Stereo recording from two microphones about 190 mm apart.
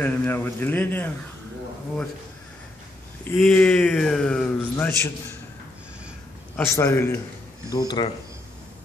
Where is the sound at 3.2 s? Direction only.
10° left (ahead or behind).